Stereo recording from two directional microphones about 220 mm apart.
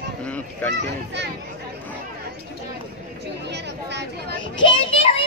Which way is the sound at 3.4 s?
50° right (ahead or behind).